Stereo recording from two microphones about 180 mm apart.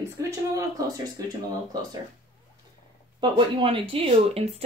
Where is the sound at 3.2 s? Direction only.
30° right (ahead or behind).